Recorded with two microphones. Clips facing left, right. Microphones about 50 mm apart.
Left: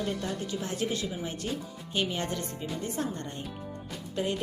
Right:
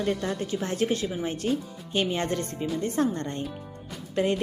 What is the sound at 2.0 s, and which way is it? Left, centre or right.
Speech, right.